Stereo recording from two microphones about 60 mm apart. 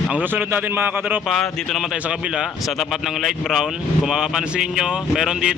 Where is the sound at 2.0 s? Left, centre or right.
Centre.